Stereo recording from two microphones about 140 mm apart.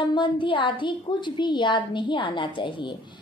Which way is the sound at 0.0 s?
35° left (ahead or behind).